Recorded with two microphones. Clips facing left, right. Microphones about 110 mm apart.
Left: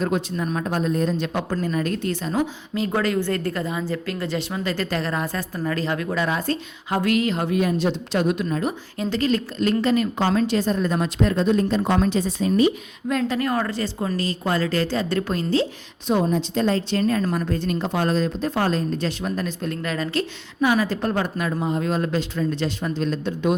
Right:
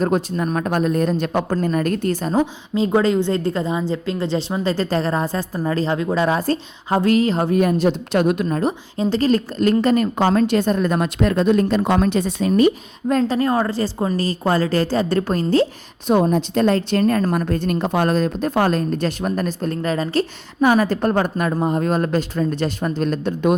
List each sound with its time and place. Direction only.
0.0 s a woman's voice: 45° right (ahead or behind)
2.3 s a woman's voice: 25° right (ahead or behind)
6.2 s a woman's voice: 35° right (ahead or behind)
7.6 s a woman's voice: 50° right (ahead or behind)
8.6 s a woman's voice: 30° right (ahead or behind); by 12.7 s 55° right (ahead or behind)
13.1 s a woman's voice: 35° right (ahead or behind)
20.6 s a woman's voice: 45° right (ahead or behind)